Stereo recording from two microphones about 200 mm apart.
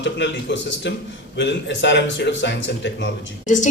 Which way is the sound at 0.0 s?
60° left (ahead or behind).